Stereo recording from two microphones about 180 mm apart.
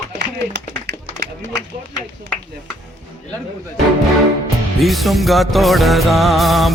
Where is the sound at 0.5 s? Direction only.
70° right (ahead or behind).